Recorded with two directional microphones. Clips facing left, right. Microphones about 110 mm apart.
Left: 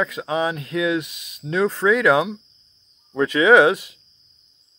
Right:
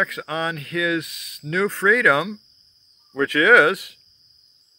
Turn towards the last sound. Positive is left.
turn(degrees=25)  # may be behind; listen again after turning